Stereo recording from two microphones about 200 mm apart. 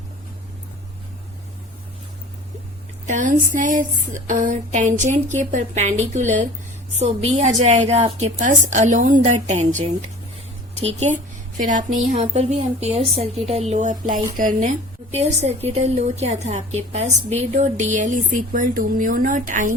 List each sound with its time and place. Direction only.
3.1 s a woman's voice: 40° right (ahead or behind)